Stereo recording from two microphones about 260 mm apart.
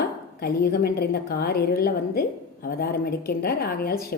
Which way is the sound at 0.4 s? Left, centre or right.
Left.